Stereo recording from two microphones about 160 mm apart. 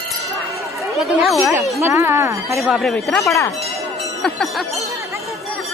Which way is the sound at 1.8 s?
15° right (ahead or behind).